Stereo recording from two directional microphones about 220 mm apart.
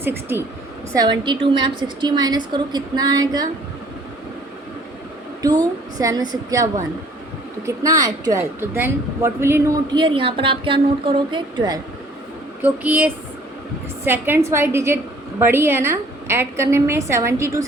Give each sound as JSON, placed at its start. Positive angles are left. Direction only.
{"t": 0.0, "sound": "a woman's voice", "side_deg": -10}
{"t": 1.2, "sound": "a woman's voice", "side_deg": -20}
{"t": 5.4, "sound": "a woman's voice", "side_deg": -15}
{"t": 12.6, "sound": "a woman's voice", "side_deg": -5}